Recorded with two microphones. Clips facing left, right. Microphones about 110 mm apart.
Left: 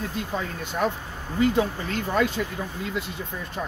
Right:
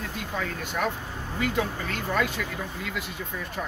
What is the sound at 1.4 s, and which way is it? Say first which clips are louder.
Speech: left 6 dB; 30° left (ahead or behind).